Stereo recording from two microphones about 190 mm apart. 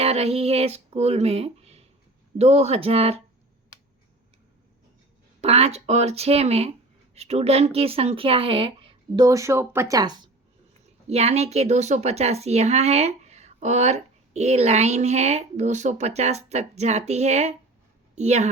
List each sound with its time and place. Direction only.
0.0 s a woman's voice: 35° right (ahead or behind)
5.4 s a woman's voice: 35° right (ahead or behind)
11.1 s a woman's voice: 35° right (ahead or behind)